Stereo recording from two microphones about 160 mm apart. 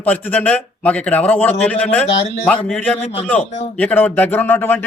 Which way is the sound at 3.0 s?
40° left (ahead or behind).